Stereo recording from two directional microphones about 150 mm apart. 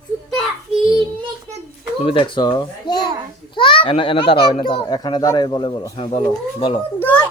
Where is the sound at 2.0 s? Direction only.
35° left (ahead or behind).